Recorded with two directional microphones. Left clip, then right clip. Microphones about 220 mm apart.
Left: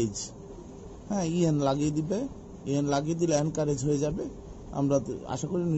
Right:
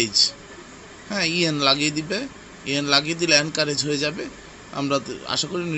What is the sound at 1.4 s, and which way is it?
A man's voice, 30° right (ahead or behind).